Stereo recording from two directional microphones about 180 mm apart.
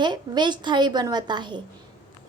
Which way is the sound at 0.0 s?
25° right (ahead or behind).